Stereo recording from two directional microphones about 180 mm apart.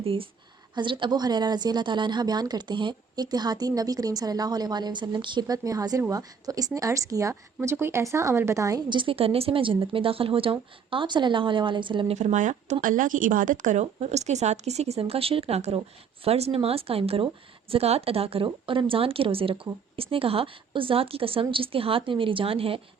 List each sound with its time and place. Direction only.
0.0 s a woman's voice: 30° right (ahead or behind)
12.1 s a woman's voice: 45° right (ahead or behind)